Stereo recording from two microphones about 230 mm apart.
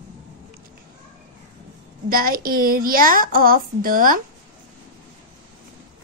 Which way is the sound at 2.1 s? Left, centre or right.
Right.